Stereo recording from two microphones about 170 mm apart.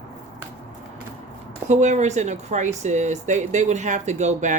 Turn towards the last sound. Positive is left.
turn(degrees=-45)  # may be behind; listen again after turning